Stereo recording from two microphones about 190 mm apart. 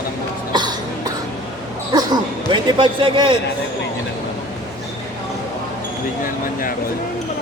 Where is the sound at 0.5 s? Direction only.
20° right (ahead or behind).